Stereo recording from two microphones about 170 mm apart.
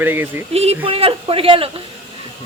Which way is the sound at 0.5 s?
35° right (ahead or behind).